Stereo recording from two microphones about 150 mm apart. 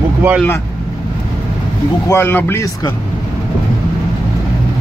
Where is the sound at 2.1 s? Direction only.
15° left (ahead or behind).